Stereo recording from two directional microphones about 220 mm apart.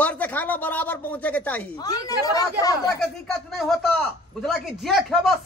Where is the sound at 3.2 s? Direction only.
Centre (ahead or behind).